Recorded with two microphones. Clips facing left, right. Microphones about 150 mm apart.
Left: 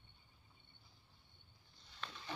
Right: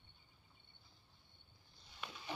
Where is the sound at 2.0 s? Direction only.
10° right (ahead or behind).